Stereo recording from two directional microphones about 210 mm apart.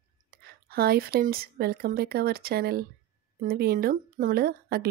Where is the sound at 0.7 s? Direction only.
45° right (ahead or behind).